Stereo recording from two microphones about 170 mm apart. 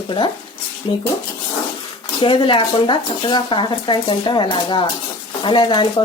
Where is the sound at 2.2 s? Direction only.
30° left (ahead or behind).